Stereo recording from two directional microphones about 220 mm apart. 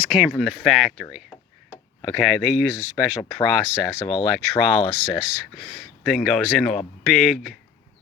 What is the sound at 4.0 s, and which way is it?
Speech, 20° left (ahead or behind).